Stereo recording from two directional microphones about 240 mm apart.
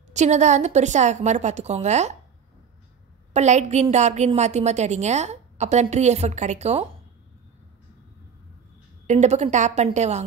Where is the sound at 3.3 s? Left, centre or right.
Right.